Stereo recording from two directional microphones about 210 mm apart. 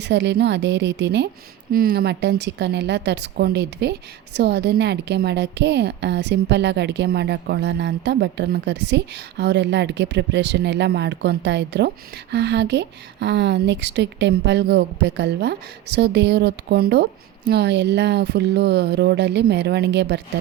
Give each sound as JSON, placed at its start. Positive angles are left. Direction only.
{"t": 0.0, "sound": "a woman's voice", "side_deg": -55}
{"t": 1.7, "sound": "a woman's voice", "side_deg": -45}